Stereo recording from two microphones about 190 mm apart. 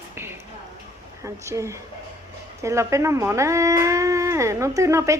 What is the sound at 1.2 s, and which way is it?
A woman's voice, 15° right (ahead or behind).